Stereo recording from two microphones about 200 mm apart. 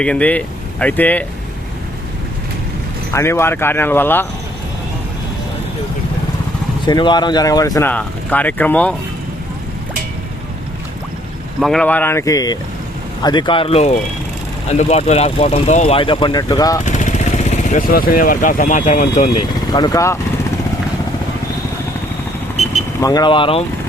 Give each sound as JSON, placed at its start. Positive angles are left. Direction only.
{"t": 0.0, "sound": "speech", "side_deg": 5}
{"t": 3.1, "sound": "speech", "side_deg": 15}
{"t": 6.8, "sound": "speech", "side_deg": 20}
{"t": 11.6, "sound": "speech", "side_deg": 5}
{"t": 16.8, "sound": "speech", "side_deg": 35}
{"t": 22.5, "sound": "vehicle", "side_deg": -35}
{"t": 23.0, "sound": "speech", "side_deg": 20}